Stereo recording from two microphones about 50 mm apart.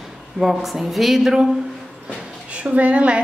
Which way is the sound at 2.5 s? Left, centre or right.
Right.